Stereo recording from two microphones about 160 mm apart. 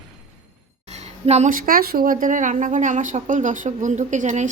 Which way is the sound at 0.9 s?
45° right (ahead or behind).